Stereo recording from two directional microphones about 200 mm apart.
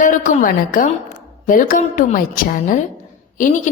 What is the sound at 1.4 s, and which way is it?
A woman's voice, 40° left (ahead or behind).